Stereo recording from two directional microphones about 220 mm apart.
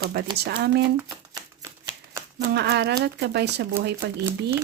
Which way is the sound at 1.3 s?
15° right (ahead or behind).